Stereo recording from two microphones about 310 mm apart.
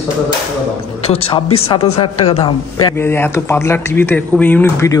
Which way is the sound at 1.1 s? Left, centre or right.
Centre.